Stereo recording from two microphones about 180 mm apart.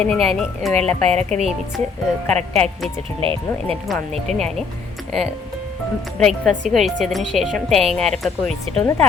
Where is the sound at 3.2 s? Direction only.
30° right (ahead or behind).